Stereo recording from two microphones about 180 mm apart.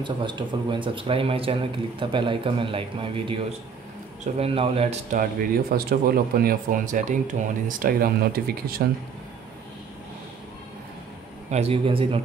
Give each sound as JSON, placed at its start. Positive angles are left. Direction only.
{"t": 0.0, "sound": "a man's voice", "side_deg": -25}
{"t": 5.1, "sound": "speech", "side_deg": -50}
{"t": 11.5, "sound": "a man's voice", "side_deg": -35}